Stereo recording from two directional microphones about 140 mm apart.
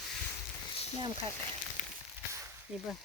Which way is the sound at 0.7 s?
45° left (ahead or behind).